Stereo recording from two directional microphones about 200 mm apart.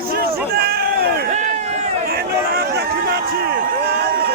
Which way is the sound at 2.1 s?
50° right (ahead or behind).